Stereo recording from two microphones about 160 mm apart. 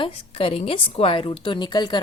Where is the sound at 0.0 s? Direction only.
35° left (ahead or behind).